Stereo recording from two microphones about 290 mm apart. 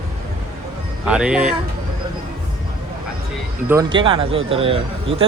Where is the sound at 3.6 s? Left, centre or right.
Centre.